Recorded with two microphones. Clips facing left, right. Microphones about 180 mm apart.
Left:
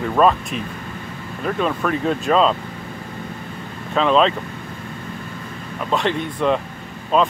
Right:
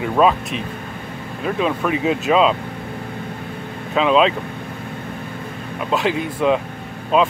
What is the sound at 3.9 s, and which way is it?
Speech, 5° right (ahead or behind).